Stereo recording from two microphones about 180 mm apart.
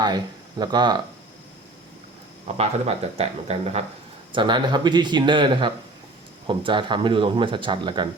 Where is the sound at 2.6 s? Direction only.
35° right (ahead or behind).